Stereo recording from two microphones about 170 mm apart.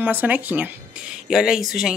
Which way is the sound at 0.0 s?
10° right (ahead or behind).